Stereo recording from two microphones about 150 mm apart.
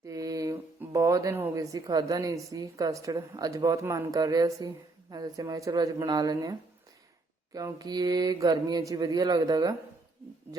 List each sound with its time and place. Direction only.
0.0 s speech: 20° right (ahead or behind)